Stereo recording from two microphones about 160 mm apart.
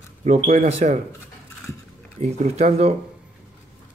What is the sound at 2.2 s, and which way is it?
Speech, 40° right (ahead or behind).